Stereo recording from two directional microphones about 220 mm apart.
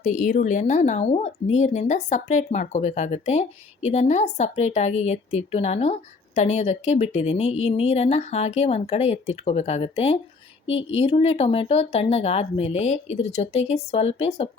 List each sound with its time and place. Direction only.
0.0 s speech: 35° left (ahead or behind)
10.7 s speech: 60° left (ahead or behind)
11.0 s speech: 25° left (ahead or behind)